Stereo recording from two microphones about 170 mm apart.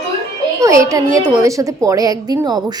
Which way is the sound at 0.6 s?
20° right (ahead or behind).